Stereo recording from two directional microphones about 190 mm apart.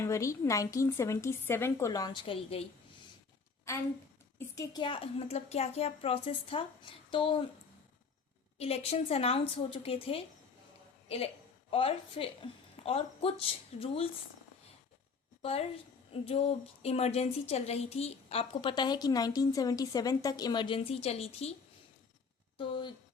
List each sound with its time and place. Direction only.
0.0 s a woman's voice: 15° left (ahead or behind)
4.4 s speech: 20° left (ahead or behind)
8.5 s a woman's voice: 30° left (ahead or behind)
11.7 s speech: 30° left (ahead or behind)
15.4 s a woman's voice: 30° left (ahead or behind)
22.5 s speech: 25° left (ahead or behind)